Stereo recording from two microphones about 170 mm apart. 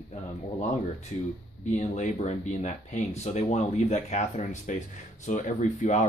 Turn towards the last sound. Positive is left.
turn(degrees=45)  # may be behind; listen again after turning